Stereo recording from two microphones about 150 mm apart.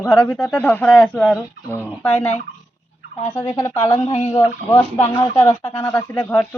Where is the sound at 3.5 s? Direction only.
20° left (ahead or behind).